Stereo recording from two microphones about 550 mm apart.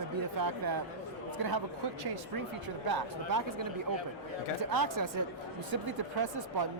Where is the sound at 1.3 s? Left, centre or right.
Right.